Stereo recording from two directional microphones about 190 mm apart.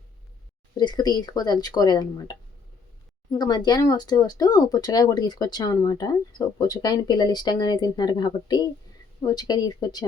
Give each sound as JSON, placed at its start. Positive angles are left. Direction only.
{"t": 0.8, "sound": "speech", "side_deg": 20}
{"t": 3.3, "sound": "speech", "side_deg": 20}